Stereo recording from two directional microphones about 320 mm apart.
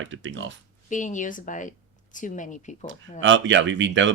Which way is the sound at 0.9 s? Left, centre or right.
Left.